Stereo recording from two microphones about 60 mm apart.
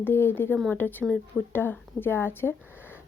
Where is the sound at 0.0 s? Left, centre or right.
Left.